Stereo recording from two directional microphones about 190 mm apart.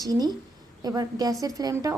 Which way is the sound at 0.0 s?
20° right (ahead or behind).